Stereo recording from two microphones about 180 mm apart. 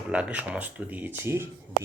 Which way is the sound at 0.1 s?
5° right (ahead or behind).